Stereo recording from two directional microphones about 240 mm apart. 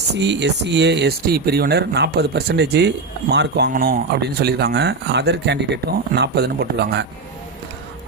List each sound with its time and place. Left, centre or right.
0.2 s speech: right